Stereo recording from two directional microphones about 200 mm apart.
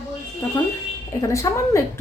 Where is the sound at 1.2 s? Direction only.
15° left (ahead or behind).